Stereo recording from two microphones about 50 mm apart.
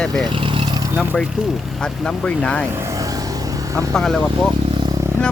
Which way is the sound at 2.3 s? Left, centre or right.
Left.